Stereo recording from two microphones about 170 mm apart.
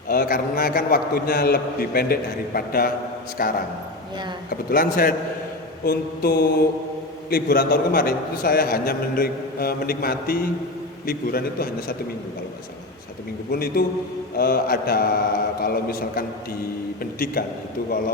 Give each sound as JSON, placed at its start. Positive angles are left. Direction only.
{"t": 0.1, "sound": "a man's voice", "side_deg": 60}
{"t": 13.5, "sound": "a man's voice", "side_deg": 65}